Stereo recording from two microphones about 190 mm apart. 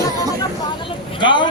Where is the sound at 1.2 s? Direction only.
25° left (ahead or behind).